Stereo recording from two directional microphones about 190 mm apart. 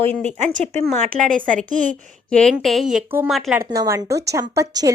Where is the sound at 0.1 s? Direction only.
10° left (ahead or behind).